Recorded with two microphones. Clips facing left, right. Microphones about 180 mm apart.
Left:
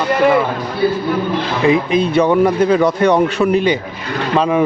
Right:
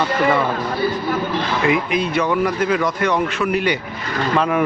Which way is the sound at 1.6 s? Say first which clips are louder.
Left 7 dB; 25° left (ahead or behind).